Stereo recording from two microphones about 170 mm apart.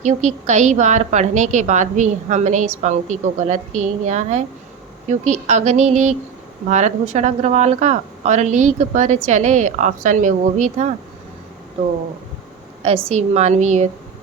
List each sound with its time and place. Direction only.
0.0 s a woman's voice: 45° right (ahead or behind)
12.8 s a woman's voice: 35° right (ahead or behind)